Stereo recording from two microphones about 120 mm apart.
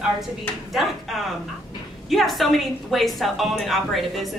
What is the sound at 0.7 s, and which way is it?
A woman's voice, centre (ahead or behind).